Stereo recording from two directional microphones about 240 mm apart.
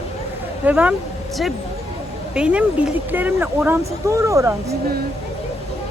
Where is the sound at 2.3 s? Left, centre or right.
Centre.